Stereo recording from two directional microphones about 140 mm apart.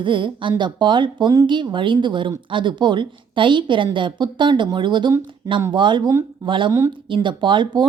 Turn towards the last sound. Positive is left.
turn(degrees=-35)  # may be behind; listen again after turning